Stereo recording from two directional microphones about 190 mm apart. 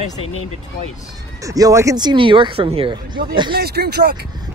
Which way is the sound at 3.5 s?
55° right (ahead or behind).